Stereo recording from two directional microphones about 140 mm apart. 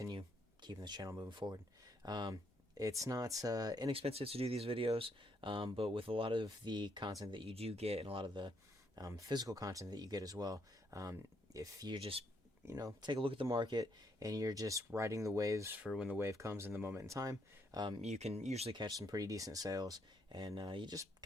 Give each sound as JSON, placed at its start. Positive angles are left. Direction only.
{"t": 0.0, "sound": "speech", "side_deg": -35}
{"t": 4.0, "sound": "speech", "side_deg": -45}
{"t": 11.9, "sound": "speech", "side_deg": -40}
{"t": 12.6, "sound": "speech", "side_deg": -25}
{"t": 18.0, "sound": "speech", "side_deg": -55}
{"t": 18.7, "sound": "speech", "side_deg": -30}